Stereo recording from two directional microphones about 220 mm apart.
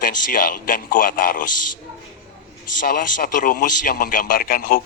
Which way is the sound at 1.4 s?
90° left.